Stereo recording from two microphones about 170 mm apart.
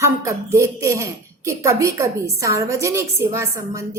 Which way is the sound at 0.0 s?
15° right (ahead or behind).